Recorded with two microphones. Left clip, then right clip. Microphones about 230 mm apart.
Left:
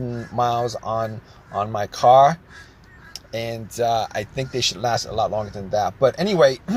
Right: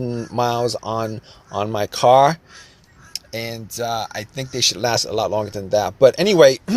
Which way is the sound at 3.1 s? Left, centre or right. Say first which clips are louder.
Even; centre.